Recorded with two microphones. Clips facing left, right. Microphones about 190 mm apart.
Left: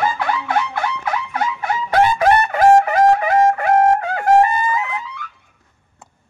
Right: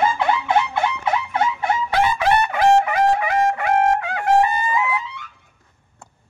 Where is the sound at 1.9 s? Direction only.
50° left (ahead or behind).